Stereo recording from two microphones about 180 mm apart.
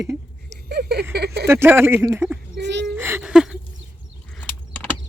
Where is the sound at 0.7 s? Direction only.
65° right (ahead or behind).